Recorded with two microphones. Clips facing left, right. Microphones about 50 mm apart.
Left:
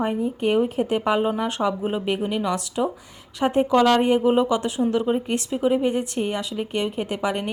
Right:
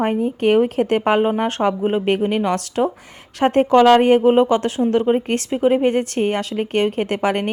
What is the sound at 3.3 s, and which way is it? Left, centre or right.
Speech, right.